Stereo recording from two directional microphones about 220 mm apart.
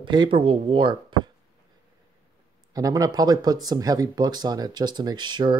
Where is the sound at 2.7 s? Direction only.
15° right (ahead or behind).